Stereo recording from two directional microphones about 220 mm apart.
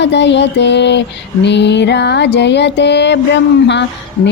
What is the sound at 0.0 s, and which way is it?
Music, 50° left (ahead or behind).